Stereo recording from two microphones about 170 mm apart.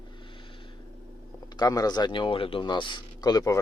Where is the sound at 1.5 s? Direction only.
20° left (ahead or behind).